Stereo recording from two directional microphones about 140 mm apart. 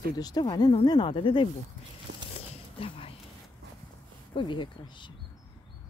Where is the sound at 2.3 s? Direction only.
40° left (ahead or behind).